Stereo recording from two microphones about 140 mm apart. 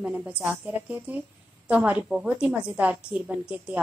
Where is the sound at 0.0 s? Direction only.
10° right (ahead or behind).